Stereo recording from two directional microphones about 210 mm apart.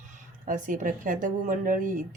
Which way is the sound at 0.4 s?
40° right (ahead or behind).